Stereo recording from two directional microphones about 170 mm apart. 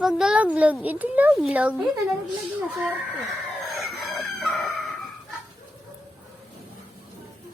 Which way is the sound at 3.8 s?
Centre (ahead or behind).